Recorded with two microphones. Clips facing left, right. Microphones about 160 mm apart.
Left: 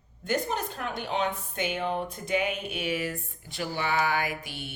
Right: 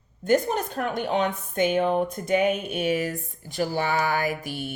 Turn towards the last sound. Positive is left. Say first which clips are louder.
# right 7 dB
turn(degrees=-40)  # may be behind; listen again after turning